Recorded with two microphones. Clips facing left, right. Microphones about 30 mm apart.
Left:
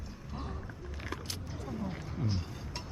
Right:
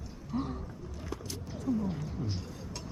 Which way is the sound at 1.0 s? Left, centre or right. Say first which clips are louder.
Even; left.